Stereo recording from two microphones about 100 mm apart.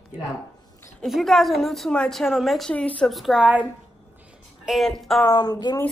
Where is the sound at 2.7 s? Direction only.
10° left (ahead or behind).